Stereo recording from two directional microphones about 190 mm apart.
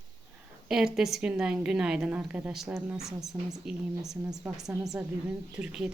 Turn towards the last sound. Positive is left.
turn(degrees=-5)  # may be behind; listen again after turning